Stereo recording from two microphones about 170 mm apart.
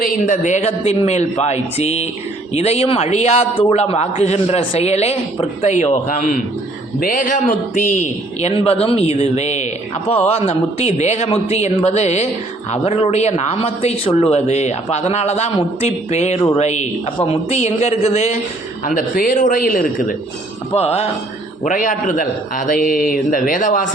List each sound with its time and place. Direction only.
0.0 s a man's voice: 50° left (ahead or behind)
18.9 s a man's voice: 50° left (ahead or behind)
20.7 s a man's voice: 40° left (ahead or behind)
21.6 s a man's voice: 50° left (ahead or behind)